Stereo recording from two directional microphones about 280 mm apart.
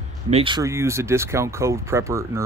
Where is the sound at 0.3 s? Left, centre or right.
Centre.